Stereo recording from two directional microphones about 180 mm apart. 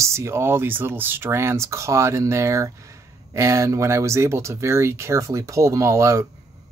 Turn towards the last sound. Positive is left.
turn(degrees=-15)  # may be behind; listen again after turning